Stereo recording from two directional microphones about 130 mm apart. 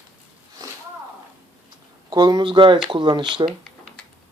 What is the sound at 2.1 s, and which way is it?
Speech, 35° right (ahead or behind).